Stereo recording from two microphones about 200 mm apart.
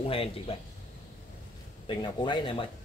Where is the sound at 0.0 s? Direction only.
30° left (ahead or behind).